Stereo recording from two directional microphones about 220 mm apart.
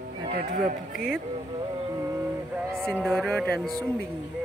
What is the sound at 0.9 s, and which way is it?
Speech, centre (ahead or behind).